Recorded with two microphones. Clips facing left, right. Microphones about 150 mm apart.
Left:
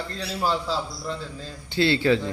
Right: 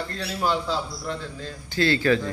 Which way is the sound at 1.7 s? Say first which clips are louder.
Left 1 dB; 20° left (ahead or behind).